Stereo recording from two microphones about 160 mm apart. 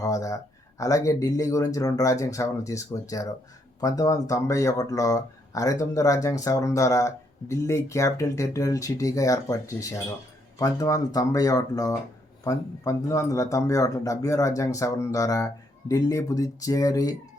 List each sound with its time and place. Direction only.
0.0 s speech: 20° left (ahead or behind)